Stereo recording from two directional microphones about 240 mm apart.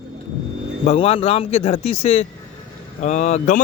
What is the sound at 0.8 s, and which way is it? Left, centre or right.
Speech, left.